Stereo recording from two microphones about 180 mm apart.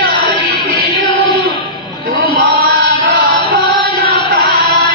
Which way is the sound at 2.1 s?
50° right (ahead or behind).